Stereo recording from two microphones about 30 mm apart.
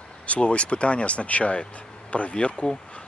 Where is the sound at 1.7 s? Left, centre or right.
Left.